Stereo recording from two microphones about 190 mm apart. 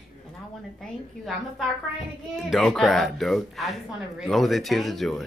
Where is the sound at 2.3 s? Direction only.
Centre (ahead or behind).